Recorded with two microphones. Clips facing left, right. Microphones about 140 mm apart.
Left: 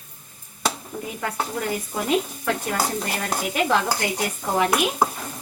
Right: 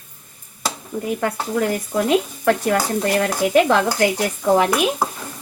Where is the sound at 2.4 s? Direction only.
70° right (ahead or behind).